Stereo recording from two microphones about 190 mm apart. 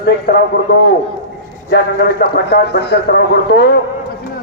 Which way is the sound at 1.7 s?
60° left (ahead or behind).